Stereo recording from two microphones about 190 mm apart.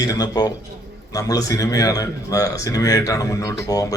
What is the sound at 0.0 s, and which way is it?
A man's voice, 20° left (ahead or behind).